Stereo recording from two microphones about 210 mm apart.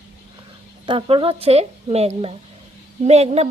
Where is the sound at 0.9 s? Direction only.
25° right (ahead or behind).